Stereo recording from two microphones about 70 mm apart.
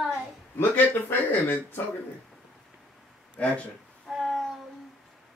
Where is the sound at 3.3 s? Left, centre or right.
Left.